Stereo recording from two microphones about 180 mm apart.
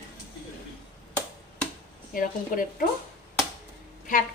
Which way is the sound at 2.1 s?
50° left (ahead or behind).